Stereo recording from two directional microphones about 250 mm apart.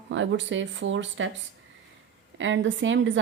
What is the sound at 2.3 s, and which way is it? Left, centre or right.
Speech, right.